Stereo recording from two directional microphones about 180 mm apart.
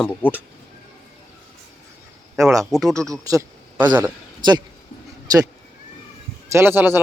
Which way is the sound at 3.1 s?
20° right (ahead or behind).